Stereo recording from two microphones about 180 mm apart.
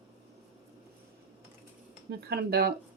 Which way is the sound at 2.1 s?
60° right (ahead or behind).